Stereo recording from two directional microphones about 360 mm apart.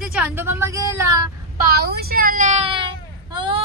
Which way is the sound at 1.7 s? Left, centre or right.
Right.